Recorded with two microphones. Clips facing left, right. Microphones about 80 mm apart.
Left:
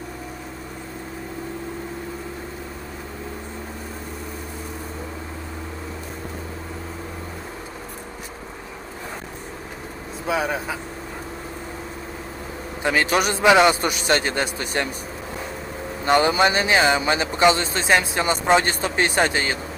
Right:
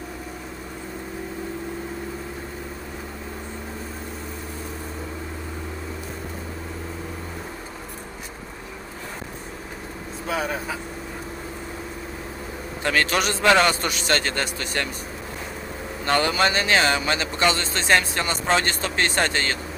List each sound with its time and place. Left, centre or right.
10.2 s speech: centre
12.8 s speech: centre
16.0 s speech: centre